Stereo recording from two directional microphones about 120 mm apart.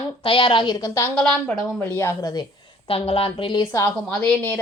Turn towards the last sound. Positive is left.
turn(degrees=10)  # may be behind; listen again after turning